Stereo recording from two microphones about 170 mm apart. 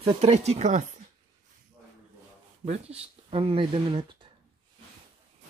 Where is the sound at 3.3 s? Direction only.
30° right (ahead or behind).